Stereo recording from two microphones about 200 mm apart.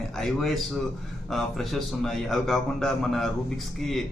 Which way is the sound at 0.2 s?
Centre (ahead or behind).